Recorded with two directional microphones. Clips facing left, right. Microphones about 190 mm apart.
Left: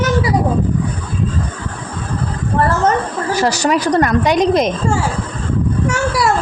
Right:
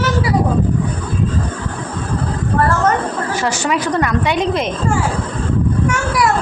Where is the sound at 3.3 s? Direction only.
40° left (ahead or behind).